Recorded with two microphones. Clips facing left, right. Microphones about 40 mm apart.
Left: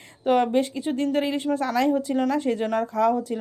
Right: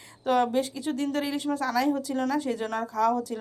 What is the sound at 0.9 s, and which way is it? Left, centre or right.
A woman's voice, left.